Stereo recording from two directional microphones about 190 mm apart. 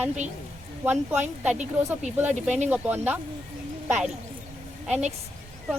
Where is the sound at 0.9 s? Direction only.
10° right (ahead or behind).